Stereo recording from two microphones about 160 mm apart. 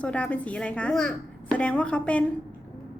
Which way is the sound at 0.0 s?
5° left (ahead or behind).